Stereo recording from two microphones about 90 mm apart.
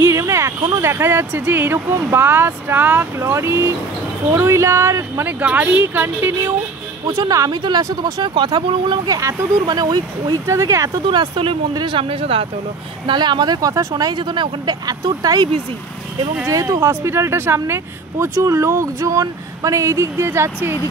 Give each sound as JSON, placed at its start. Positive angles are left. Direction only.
{"t": 0.0, "sound": "speech", "side_deg": -35}
{"t": 5.4, "sound": "speech", "side_deg": -20}
{"t": 7.1, "sound": "speech", "side_deg": -35}
{"t": 7.5, "sound": "speech", "side_deg": -50}
{"t": 8.6, "sound": "speech", "side_deg": -65}
{"t": 9.0, "sound": "speech", "side_deg": -45}
{"t": 10.4, "sound": "speech", "side_deg": -35}
{"t": 11.1, "sound": "speech", "side_deg": -75}
{"t": 11.7, "sound": "speech", "side_deg": -65}
{"t": 13.0, "sound": "speech", "side_deg": -60}
{"t": 16.4, "sound": "speech", "side_deg": -35}